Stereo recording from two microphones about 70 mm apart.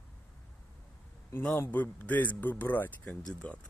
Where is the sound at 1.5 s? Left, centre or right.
Left.